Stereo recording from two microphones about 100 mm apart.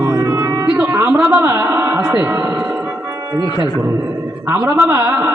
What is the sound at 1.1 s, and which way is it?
Speech, 15° right (ahead or behind).